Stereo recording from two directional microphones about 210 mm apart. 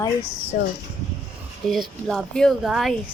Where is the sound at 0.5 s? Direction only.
45° left (ahead or behind).